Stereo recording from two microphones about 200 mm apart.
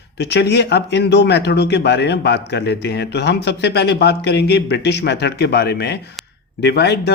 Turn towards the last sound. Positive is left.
turn(degrees=55)  # may be behind; listen again after turning